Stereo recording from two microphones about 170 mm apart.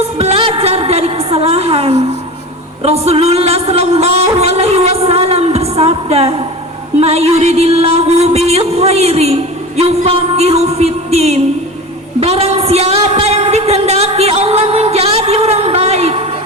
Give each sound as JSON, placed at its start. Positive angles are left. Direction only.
{"t": 0.0, "sound": "music", "side_deg": -35}
{"t": 2.8, "sound": "speech", "side_deg": -35}
{"t": 7.0, "sound": "music", "side_deg": -40}
{"t": 12.2, "sound": "a sound", "side_deg": -35}